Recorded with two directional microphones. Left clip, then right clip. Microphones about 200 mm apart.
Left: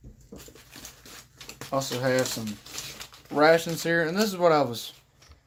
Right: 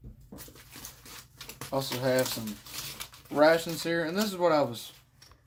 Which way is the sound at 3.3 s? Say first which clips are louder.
Left 3 dB; 25° left (ahead or behind).